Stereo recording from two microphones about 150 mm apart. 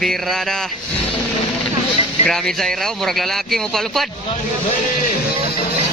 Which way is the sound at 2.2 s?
5° left (ahead or behind).